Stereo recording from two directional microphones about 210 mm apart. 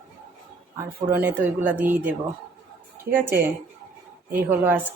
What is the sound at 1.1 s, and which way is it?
A woman's voice, 10° right (ahead or behind).